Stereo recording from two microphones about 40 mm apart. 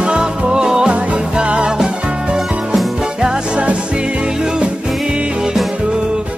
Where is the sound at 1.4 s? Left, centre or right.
Right.